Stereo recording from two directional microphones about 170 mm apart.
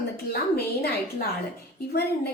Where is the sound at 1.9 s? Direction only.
65° left (ahead or behind).